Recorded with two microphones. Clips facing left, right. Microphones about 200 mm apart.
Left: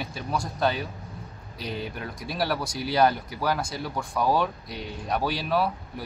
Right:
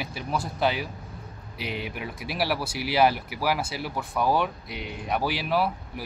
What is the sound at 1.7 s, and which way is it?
Speech, 70° right (ahead or behind).